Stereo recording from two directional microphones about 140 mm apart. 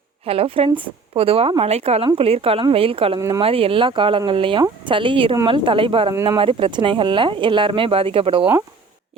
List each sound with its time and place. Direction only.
0.3 s speech: 45° right (ahead or behind)
3.2 s speech: 20° right (ahead or behind)
3.4 s speech: 40° right (ahead or behind)